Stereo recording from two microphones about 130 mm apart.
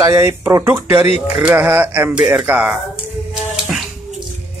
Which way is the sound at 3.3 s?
5° right (ahead or behind).